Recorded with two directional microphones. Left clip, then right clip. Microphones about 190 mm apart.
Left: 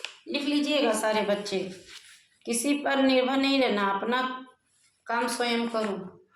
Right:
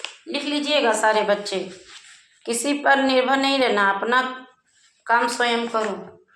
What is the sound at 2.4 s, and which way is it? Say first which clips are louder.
A woman's voice: right 6 dB; 10° left (ahead or behind).